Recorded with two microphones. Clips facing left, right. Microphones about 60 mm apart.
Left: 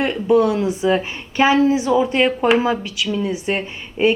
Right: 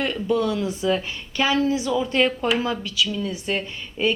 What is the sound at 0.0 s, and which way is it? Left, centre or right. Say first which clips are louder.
A woman's voice: left 7 dB; left.